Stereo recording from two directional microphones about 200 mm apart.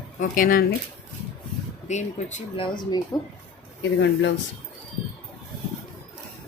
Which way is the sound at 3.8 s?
60° left (ahead or behind).